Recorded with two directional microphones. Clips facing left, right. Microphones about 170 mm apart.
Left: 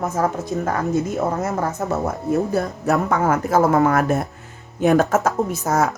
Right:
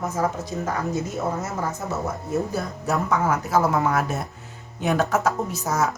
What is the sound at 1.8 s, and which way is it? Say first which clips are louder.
Speech: left 5 dB; 55° left (ahead or behind).